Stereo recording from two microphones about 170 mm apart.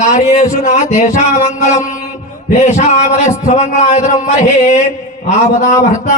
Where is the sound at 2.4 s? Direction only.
40° left (ahead or behind).